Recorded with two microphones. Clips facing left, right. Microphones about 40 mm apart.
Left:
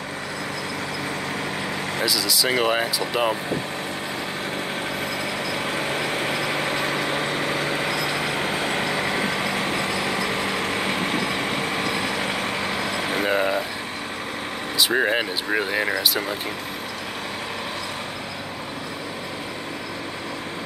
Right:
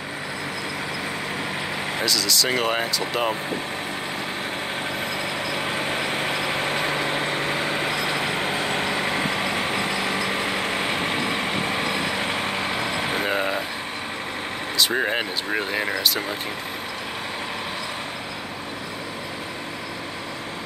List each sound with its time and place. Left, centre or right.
2.0 s speech: centre
5.5 s vehicle: right
9.4 s vehicle: right
13.2 s a sound: centre
14.8 s speech: centre